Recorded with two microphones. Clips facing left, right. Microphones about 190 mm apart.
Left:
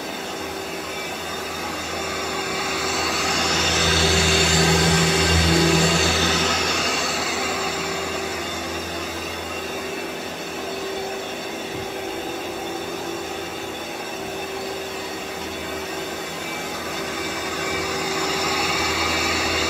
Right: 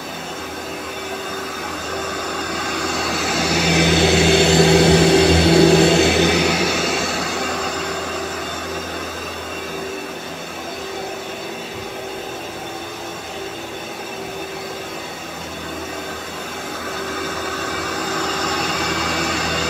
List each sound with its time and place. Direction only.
2.8 s vehicle: centre (ahead or behind); by 4.3 s 20° right (ahead or behind)
4.3 s microwave oven: 65° right (ahead or behind)
5.1 s vehicle: 65° right (ahead or behind)
6.1 s a sound: 10° right (ahead or behind)
18.1 s vehicle: 10° left (ahead or behind)